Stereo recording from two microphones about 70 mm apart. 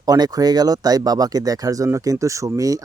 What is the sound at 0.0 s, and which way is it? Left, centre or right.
Speech, right.